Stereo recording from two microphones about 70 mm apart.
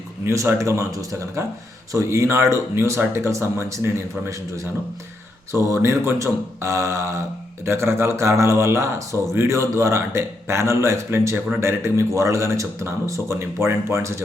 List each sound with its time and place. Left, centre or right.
0.3 s a man's voice: right
1.4 s a man's voice: right
5.5 s a man's voice: right